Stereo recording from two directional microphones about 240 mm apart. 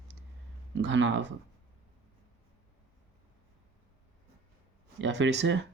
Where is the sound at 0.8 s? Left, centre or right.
Right.